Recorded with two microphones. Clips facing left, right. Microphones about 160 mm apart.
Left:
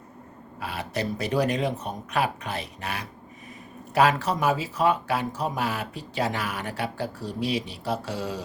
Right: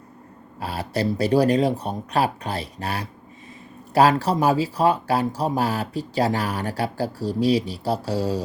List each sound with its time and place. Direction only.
0.6 s speech: 35° right (ahead or behind)